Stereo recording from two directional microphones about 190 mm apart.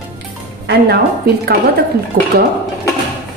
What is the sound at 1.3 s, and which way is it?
A woman's voice, 55° right (ahead or behind).